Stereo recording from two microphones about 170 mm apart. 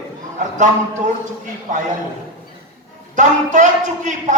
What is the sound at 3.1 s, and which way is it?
A man's voice, 45° right (ahead or behind).